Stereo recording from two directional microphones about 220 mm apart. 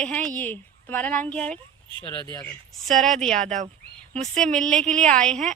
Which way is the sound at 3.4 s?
35° right (ahead or behind).